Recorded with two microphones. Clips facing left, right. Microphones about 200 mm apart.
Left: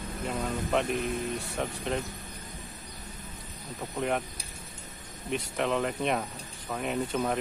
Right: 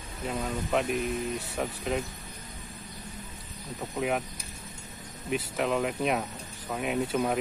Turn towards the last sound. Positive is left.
turn(degrees=-5)  # may be behind; listen again after turning